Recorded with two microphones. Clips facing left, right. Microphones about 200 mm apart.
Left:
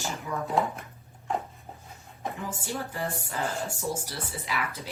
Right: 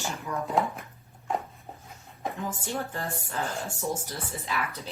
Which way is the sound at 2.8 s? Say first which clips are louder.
Even; 10° left (ahead or behind).